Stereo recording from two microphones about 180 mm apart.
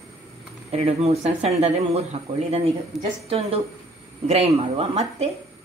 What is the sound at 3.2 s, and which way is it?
Speech, 35° right (ahead or behind).